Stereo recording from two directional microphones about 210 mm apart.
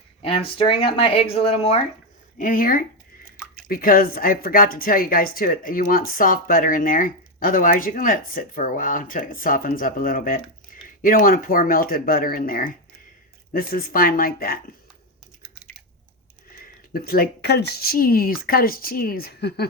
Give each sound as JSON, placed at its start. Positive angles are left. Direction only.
{"t": 0.2, "sound": "speech", "side_deg": 25}
{"t": 2.4, "sound": "speech", "side_deg": 40}
{"t": 16.6, "sound": "speech", "side_deg": 45}